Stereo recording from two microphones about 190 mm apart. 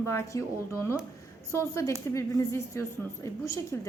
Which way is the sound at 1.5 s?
15° left (ahead or behind).